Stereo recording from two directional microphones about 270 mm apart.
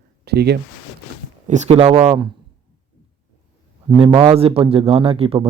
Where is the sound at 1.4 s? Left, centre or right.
Right.